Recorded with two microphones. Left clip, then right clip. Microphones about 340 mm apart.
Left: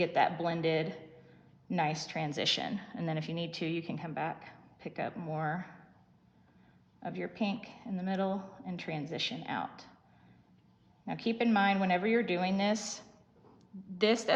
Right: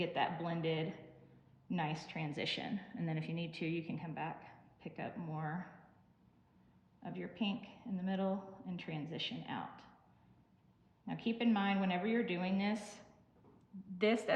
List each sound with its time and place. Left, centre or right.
0.0 s speech: centre
7.0 s speech: centre
11.0 s speech: centre
14.0 s speech: centre